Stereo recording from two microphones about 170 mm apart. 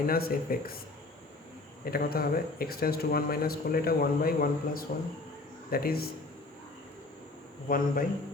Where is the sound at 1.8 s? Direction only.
60° left (ahead or behind).